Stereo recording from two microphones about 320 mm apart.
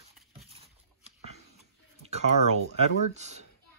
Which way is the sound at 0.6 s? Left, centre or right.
Centre.